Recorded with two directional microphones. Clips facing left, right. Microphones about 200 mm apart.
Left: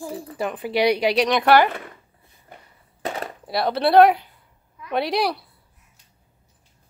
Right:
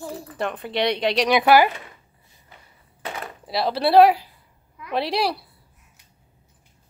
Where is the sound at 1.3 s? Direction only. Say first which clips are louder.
Right 2 dB; 5° right (ahead or behind).